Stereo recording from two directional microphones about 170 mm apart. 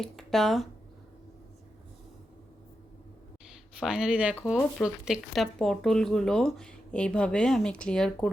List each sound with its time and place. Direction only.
0.0 s speech: centre (ahead or behind)
3.8 s speech: 5° right (ahead or behind)